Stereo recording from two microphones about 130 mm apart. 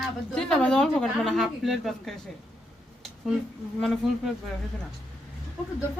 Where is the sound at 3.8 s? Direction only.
Centre (ahead or behind).